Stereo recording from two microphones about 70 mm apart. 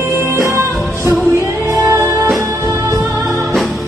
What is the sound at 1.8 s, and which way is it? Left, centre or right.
Music, right.